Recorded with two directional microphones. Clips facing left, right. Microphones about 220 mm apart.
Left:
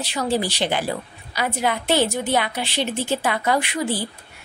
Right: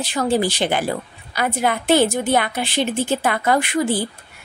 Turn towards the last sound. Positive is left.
turn(degrees=-50)  # may be behind; listen again after turning